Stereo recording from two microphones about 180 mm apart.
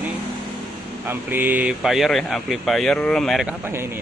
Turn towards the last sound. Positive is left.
turn(degrees=-15)  # may be behind; listen again after turning